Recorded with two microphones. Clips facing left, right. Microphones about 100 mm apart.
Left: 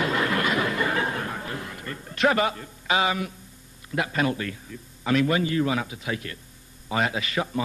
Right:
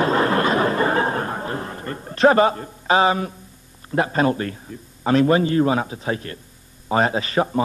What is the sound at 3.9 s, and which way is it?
A man's voice, 35° right (ahead or behind).